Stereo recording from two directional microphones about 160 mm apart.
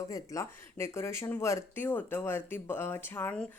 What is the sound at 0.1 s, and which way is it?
Speech, 20° left (ahead or behind).